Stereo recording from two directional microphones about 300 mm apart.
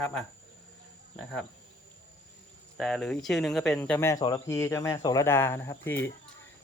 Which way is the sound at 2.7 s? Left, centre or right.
Centre.